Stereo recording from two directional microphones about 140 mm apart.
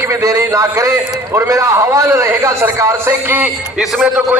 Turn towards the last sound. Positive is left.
turn(degrees=-10)  # may be behind; listen again after turning